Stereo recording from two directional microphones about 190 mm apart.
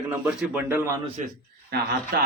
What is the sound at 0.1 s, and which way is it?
Speech, 10° right (ahead or behind).